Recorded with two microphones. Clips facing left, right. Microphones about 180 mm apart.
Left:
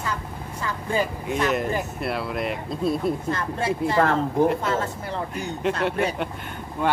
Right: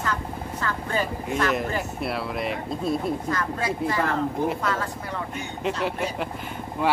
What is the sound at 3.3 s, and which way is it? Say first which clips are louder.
Speech: left 1 dB; 25° left (ahead or behind).